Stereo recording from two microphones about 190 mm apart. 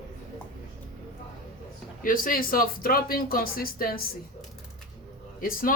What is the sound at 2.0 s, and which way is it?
Speech, 45° left (ahead or behind).